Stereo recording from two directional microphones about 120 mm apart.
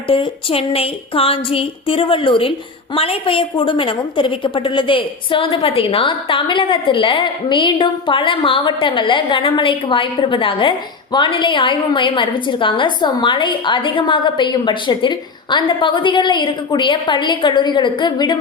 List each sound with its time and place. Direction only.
0.1 s a woman's voice: 50° left (ahead or behind)